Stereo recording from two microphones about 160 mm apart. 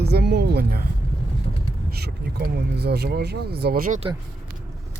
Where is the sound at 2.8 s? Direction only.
90° right; by 4.0 s 65° right (ahead or behind).